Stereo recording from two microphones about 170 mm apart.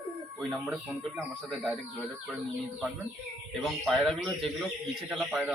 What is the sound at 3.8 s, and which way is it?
A man's voice, centre (ahead or behind).